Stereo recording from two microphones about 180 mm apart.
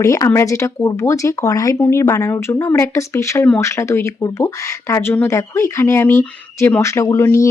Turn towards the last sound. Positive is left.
turn(degrees=15)  # may be behind; listen again after turning